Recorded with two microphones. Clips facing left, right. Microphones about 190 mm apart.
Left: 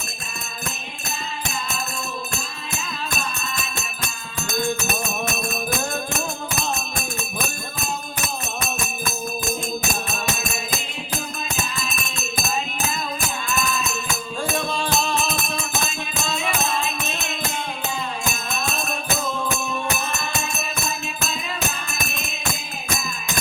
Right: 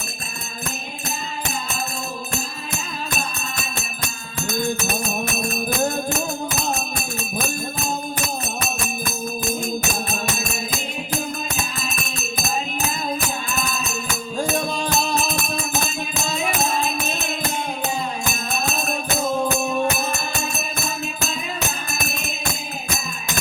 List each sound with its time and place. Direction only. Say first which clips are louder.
14.3 s music: right 3 dB; 40° right (ahead or behind)